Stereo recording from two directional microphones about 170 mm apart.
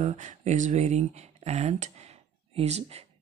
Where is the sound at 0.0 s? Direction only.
45° right (ahead or behind).